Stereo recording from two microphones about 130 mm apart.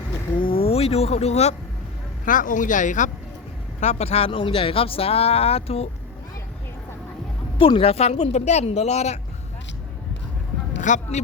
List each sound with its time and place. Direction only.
0.3 s vehicle: 40° left (ahead or behind)
2.2 s speech: 90° left; by 3.1 s 75° left (ahead or behind)
3.8 s speech: 60° left (ahead or behind)
7.6 s speech: 45° left (ahead or behind)
10.8 s speech: 70° left (ahead or behind)